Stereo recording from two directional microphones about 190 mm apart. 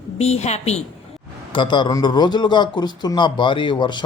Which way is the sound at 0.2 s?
35° left (ahead or behind).